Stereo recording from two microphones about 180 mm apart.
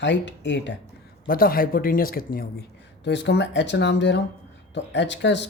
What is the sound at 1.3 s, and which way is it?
Speech, 55° left (ahead or behind).